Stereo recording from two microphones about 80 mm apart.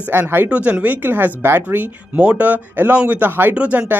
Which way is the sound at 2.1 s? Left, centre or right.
Centre.